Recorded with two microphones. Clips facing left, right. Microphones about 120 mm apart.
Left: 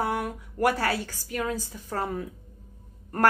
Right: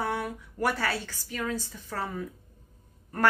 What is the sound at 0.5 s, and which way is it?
Speech, 45° left (ahead or behind).